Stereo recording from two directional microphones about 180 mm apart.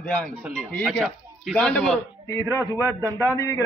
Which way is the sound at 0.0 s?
5° left (ahead or behind).